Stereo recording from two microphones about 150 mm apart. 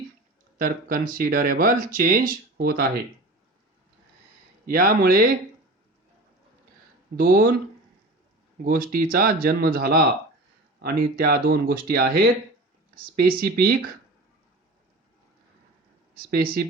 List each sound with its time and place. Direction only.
0.6 s speech: 65° right (ahead or behind)
4.6 s speech: 75° right (ahead or behind)
7.2 s speech: 85° right
8.5 s speech: 75° right (ahead or behind)
16.1 s speech: 85° right